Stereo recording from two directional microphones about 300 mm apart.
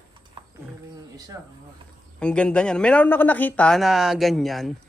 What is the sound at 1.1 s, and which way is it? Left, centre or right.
Speech, centre.